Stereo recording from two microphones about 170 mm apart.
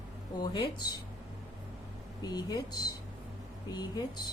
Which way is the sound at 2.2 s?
25° left (ahead or behind).